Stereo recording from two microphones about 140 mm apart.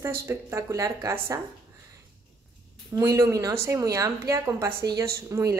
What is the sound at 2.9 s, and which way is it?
A woman's voice, 25° right (ahead or behind).